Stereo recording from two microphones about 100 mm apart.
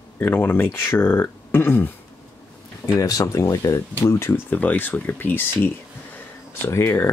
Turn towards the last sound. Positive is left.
turn(degrees=25)  # may be behind; listen again after turning